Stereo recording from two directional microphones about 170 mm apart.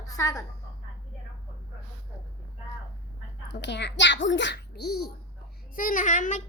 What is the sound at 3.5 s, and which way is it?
A child's voice, 90° left.